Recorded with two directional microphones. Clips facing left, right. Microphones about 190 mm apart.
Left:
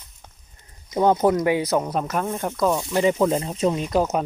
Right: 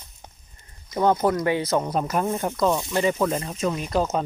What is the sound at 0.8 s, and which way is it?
Speech, 20° left (ahead or behind).